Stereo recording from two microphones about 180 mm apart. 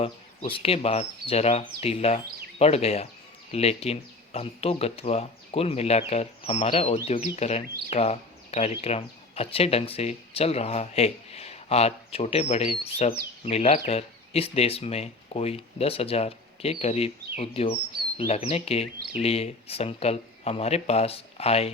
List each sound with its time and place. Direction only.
0.0 s speech: 30° left (ahead or behind)